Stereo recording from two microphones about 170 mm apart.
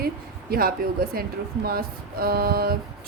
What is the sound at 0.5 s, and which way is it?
Speech, 60° right (ahead or behind).